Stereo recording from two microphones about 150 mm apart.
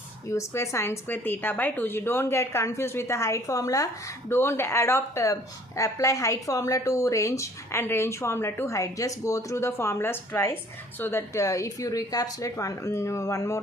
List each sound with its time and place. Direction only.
0.3 s a woman's voice: 20° left (ahead or behind)